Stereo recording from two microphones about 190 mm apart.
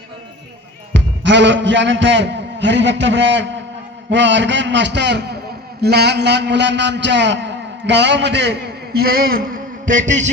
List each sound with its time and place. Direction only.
0.9 s a man's voice: 70° right (ahead or behind); by 10.3 s 40° right (ahead or behind)